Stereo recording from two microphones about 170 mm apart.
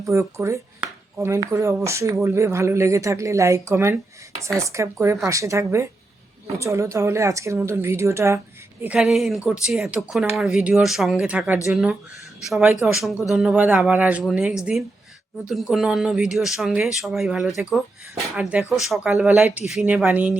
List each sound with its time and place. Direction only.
0.0 s speech: 15° right (ahead or behind)
8.8 s speech: 5° right (ahead or behind)